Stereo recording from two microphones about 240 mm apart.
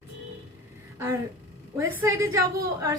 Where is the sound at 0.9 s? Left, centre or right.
Centre.